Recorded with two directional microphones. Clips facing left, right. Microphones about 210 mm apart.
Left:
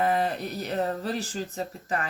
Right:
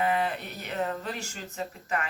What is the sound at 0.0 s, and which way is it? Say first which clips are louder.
Speech: left 2 dB; 40° left (ahead or behind).